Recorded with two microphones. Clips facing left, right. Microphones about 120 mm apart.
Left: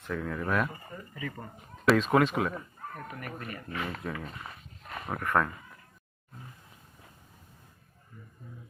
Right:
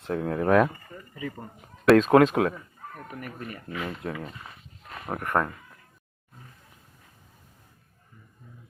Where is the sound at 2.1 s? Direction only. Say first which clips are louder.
Right 7 dB; 90° right.